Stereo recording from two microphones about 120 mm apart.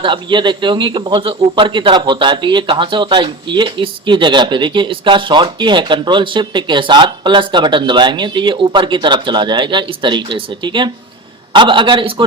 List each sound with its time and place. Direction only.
0.0 s a man's voice: 40° right (ahead or behind)